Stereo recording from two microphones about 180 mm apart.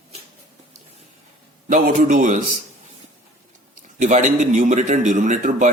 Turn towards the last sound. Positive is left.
turn(degrees=-45)  # may be behind; listen again after turning